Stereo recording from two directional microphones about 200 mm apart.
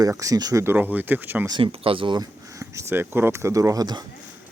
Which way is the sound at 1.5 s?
25° right (ahead or behind).